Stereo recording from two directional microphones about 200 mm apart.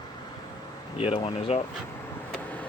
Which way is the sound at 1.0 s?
25° left (ahead or behind).